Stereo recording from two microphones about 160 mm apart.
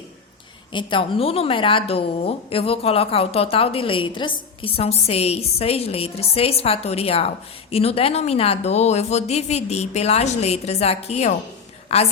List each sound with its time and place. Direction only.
0.7 s a woman's voice: 30° left (ahead or behind)